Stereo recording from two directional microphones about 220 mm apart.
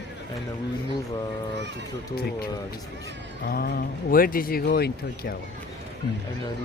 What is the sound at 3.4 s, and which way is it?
Speech, 45° left (ahead or behind).